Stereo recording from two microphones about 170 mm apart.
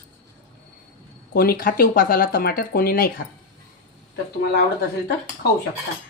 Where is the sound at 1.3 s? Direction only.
60° left (ahead or behind).